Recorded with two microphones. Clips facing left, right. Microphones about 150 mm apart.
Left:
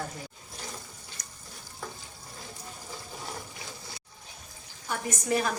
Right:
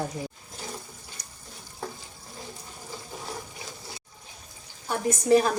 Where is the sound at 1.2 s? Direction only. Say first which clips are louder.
Even; 30° right (ahead or behind).